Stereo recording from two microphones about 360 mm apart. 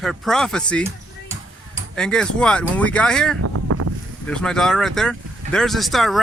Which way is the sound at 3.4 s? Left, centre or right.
Right.